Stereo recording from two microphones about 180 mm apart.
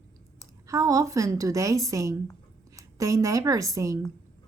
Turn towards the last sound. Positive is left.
turn(degrees=-20)  # may be behind; listen again after turning